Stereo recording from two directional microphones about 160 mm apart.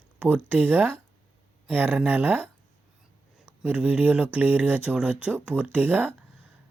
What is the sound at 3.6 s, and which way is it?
Speech, 10° right (ahead or behind).